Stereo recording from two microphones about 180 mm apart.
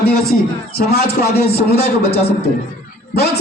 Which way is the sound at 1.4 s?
65° left (ahead or behind).